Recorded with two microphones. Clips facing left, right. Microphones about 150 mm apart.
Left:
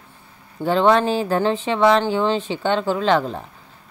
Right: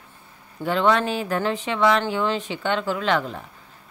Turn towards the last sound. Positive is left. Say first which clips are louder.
# left 4 dB
turn(degrees=35)  # may be behind; listen again after turning